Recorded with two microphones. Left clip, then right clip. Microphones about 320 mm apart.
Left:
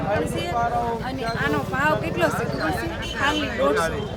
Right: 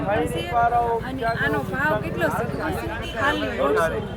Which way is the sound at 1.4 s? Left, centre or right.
Centre.